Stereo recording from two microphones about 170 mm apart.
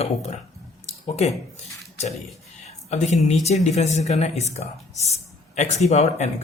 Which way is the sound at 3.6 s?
40° left (ahead or behind).